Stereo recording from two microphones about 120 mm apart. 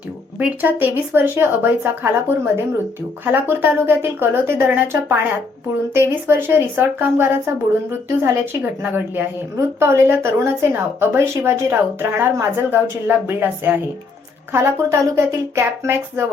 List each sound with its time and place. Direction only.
0.3 s speech: 15° right (ahead or behind)
3.2 s speech: 15° right (ahead or behind)